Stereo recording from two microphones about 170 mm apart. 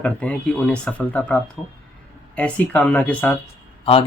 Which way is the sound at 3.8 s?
35° left (ahead or behind).